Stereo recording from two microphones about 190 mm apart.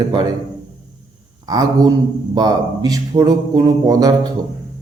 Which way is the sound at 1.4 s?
20° right (ahead or behind).